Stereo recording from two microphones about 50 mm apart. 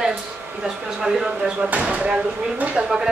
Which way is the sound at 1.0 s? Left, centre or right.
Centre.